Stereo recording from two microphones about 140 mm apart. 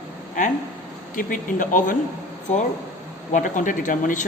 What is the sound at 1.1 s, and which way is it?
Speech, 75° left (ahead or behind).